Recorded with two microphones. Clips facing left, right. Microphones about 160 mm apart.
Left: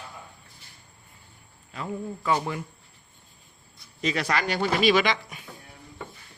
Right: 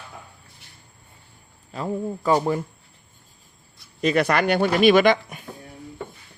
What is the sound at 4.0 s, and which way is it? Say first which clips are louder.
Speech: right 7 dB; 55° right (ahead or behind).